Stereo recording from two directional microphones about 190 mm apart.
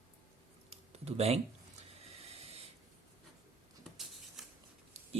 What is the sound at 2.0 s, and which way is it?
Hiss, 35° right (ahead or behind).